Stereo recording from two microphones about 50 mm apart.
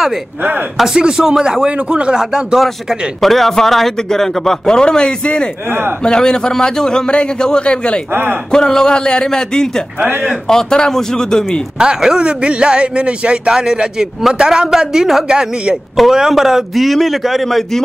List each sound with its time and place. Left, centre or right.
0.4 s speech: right
0.7 s speech: centre
2.6 s speech: centre
5.7 s speech: right
6.0 s speech: centre
8.1 s speech: right
8.5 s speech: centre
9.9 s speech: right
10.5 s speech: centre
11.8 s a man's voice: centre